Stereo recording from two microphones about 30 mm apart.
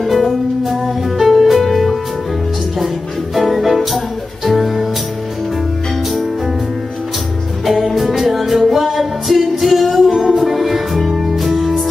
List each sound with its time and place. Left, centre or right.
0.0 s music: centre
3.3 s music: centre
7.6 s music: centre
10.0 s music: right
10.3 s music: centre